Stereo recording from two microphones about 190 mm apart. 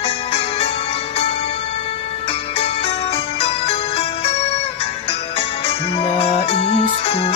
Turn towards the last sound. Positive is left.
turn(degrees=30)  # may be behind; listen again after turning